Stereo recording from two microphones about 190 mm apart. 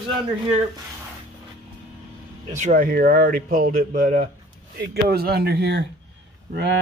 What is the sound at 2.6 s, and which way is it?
Speech, 45° right (ahead or behind).